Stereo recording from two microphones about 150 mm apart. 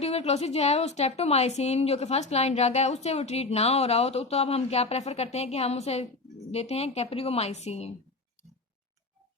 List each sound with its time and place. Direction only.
0.0 s a woman's voice: 45° left (ahead or behind)